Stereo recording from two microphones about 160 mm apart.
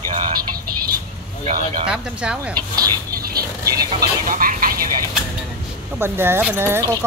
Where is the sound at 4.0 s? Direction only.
60° right (ahead or behind).